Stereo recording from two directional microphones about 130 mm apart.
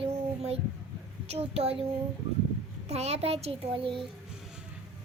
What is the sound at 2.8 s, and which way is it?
A child's voice, 55° right (ahead or behind).